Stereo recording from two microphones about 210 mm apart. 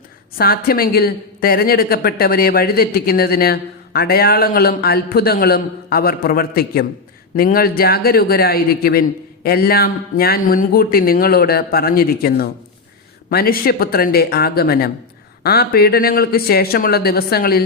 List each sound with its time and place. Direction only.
0.3 s a woman's voice: 45° left (ahead or behind)